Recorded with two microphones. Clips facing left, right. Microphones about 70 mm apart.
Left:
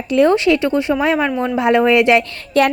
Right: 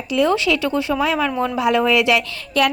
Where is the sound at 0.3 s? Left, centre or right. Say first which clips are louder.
Left 4 dB; left.